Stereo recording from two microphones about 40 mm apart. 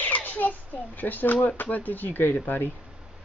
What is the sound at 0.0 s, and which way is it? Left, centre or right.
A child's voice, left.